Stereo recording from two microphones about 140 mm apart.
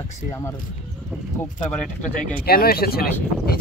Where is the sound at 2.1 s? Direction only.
80° left.